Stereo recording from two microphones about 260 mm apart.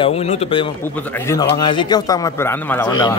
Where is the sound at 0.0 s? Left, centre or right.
Left.